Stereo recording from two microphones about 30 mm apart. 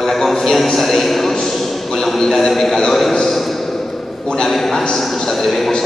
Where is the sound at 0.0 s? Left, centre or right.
Centre.